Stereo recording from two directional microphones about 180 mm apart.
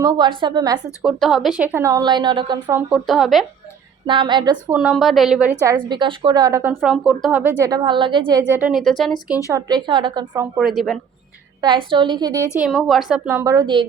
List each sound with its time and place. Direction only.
0.0 s a woman's voice: 25° right (ahead or behind)
1.0 s a woman's voice: centre (ahead or behind); by 2.7 s 25° right (ahead or behind)
2.9 s a woman's voice: centre (ahead or behind)
4.0 s a woman's voice: 25° right (ahead or behind)
4.7 s a woman's voice: 5° right (ahead or behind)
5.6 s a woman's voice: 25° right (ahead or behind)
6.8 s a woman's voice: centre (ahead or behind)
7.6 s a woman's voice: 25° right (ahead or behind)
8.5 s a woman's voice: 5° right (ahead or behind)
9.5 s a woman's voice: 20° right (ahead or behind)
10.6 s a woman's voice: centre (ahead or behind)
11.6 s a woman's voice: 25° right (ahead or behind)
12.5 s a woman's voice: 5° right (ahead or behind)
13.4 s a woman's voice: 20° right (ahead or behind)